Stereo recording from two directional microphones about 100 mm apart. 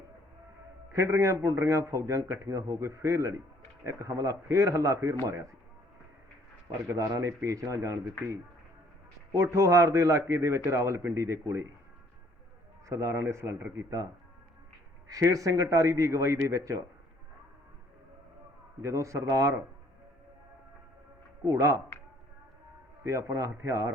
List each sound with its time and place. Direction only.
0.9 s a man's voice: 30° right (ahead or behind)
6.8 s a man's voice: 30° right (ahead or behind)
9.3 s a man's voice: 30° right (ahead or behind)
12.9 s speech: 25° right (ahead or behind)
15.0 s a man's voice: 35° right (ahead or behind)
18.8 s a man's voice: 30° right (ahead or behind)
21.4 s a man's voice: 30° right (ahead or behind)
23.0 s speech: 30° right (ahead or behind)